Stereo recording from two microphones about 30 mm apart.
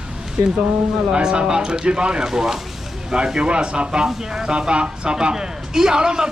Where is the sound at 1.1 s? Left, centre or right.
Right.